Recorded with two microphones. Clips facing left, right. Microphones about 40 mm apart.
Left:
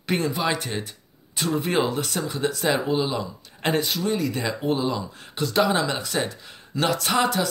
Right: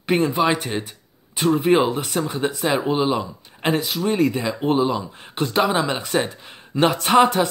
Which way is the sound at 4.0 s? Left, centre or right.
Right.